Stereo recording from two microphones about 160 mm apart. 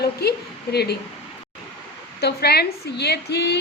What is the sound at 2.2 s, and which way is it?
A woman's voice, 90° left.